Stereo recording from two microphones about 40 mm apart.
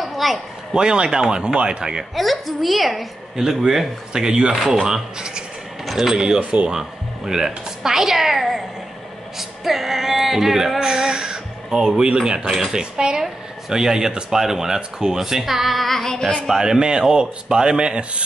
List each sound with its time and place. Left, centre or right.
0.0 s a sound: centre
0.7 s a man's voice: right
2.1 s a woman's voice: centre
3.3 s speech: centre
5.9 s speech: centre
6.1 s a man's voice: centre
9.4 s female singing: centre
12.7 s a man's voice: right; by 16.3 s centre
16.4 s a man's voice: centre